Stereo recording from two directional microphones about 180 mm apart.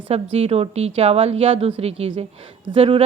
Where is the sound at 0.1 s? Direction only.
35° right (ahead or behind).